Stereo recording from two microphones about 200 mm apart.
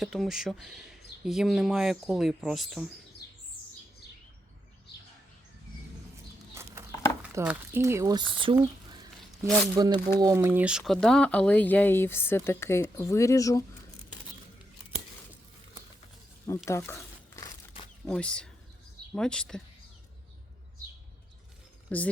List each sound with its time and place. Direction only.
0.0 s speech: centre (ahead or behind)
7.2 s speech: 10° right (ahead or behind); by 8.5 s 25° right (ahead or behind)
9.7 s speech: 25° right (ahead or behind); by 13.7 s 15° left (ahead or behind)
16.6 s crumpling: 15° left (ahead or behind)
18.1 s speech: 5° left (ahead or behind)
21.8 s speech: 5° left (ahead or behind)